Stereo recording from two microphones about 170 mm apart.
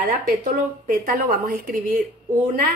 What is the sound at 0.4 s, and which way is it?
A woman's voice, 60° right (ahead or behind).